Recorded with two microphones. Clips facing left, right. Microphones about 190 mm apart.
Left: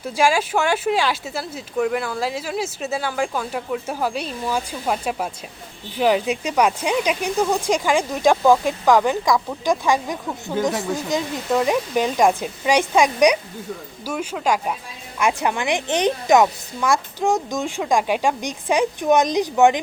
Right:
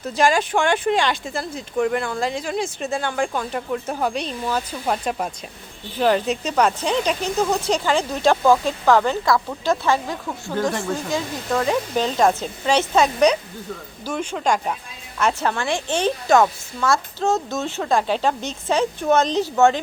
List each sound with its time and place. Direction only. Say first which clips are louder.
0.0 s speech: even; 10° left (ahead or behind)